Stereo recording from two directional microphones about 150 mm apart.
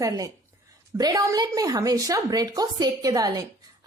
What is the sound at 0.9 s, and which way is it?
A woman's voice, 25° right (ahead or behind).